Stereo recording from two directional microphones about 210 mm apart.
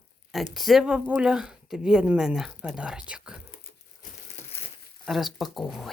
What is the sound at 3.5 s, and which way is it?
Crumpling, 40° left (ahead or behind).